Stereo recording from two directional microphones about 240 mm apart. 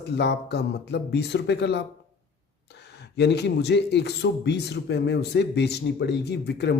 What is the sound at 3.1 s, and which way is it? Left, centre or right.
Speech, left.